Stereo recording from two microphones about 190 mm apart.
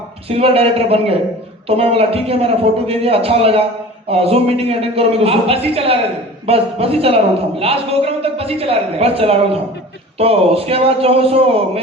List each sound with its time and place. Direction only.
0.3 s a man's voice: 30° right (ahead or behind)